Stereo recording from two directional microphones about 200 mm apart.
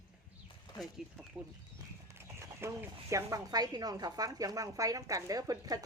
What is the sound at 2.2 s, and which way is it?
Speech, 15° right (ahead or behind).